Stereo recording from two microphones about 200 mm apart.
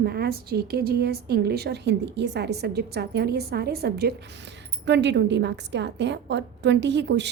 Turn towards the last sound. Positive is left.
turn(degrees=-60)  # may be behind; listen again after turning